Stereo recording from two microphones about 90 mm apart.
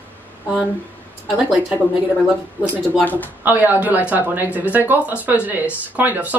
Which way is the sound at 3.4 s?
20° right (ahead or behind).